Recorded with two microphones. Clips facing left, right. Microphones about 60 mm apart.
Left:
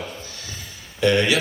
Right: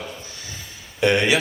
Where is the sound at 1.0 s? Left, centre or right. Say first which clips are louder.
Even; right.